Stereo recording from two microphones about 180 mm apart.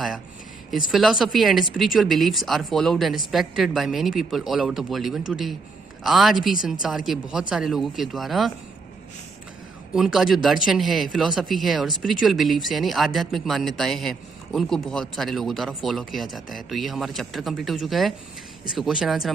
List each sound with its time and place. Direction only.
0.7 s speech: centre (ahead or behind)
9.9 s speech: centre (ahead or behind)